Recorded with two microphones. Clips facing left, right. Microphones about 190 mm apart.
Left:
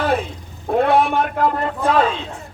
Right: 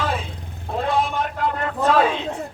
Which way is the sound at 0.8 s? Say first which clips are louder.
Left 6 dB; 65° left (ahead or behind).